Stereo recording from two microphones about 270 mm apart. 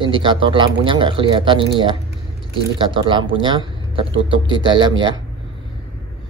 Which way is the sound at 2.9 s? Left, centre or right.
Centre.